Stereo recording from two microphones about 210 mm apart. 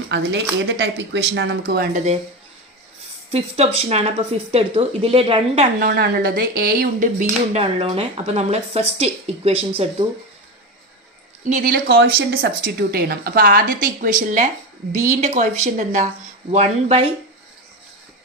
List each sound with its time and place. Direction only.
0.1 s a woman's voice: 55° right (ahead or behind)
3.3 s speech: 30° right (ahead or behind)
5.8 s speech: 50° right (ahead or behind); by 9.9 s 25° right (ahead or behind)
11.4 s a woman's voice: 35° right (ahead or behind)